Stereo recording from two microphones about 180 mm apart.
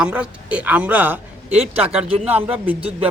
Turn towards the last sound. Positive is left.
turn(degrees=-35)  # may be behind; listen again after turning